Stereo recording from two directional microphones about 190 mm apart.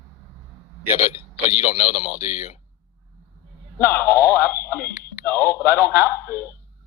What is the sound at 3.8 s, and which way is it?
Radio, 15° left (ahead or behind).